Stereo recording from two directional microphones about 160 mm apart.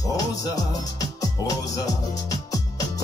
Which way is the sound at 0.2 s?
20° left (ahead or behind).